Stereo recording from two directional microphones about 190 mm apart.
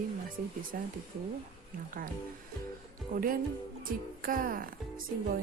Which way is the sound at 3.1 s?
50° right (ahead or behind).